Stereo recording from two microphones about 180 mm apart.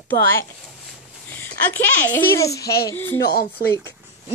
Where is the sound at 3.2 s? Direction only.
60° left (ahead or behind).